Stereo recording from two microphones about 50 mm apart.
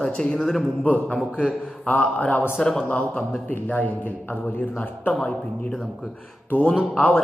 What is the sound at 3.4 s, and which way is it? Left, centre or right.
A man's voice, left.